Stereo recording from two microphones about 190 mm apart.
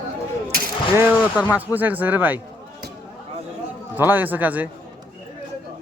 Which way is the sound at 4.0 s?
10° right (ahead or behind).